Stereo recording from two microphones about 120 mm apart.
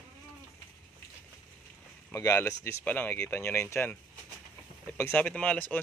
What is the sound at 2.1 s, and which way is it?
Speech, 20° left (ahead or behind).